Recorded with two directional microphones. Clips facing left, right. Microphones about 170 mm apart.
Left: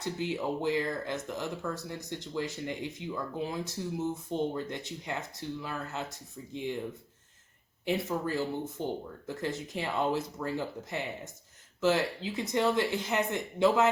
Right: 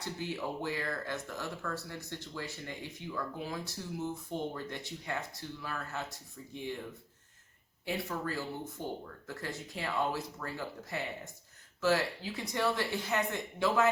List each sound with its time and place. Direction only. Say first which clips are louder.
0.0 s speech: left 5 dB; 20° left (ahead or behind)
7.9 s speech: left 5 dB; 20° left (ahead or behind)